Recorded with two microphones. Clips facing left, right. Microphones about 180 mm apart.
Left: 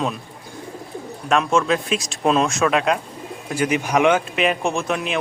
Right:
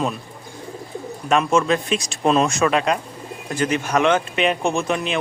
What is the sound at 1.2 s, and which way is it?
Speech, centre (ahead or behind).